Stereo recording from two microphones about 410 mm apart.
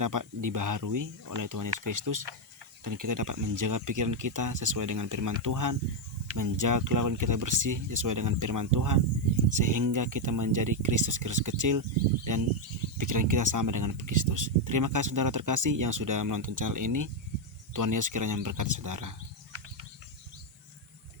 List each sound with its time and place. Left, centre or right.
0.0 s speech: right